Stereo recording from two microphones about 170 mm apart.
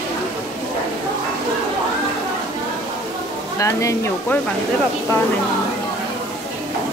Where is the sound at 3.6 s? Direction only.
20° left (ahead or behind).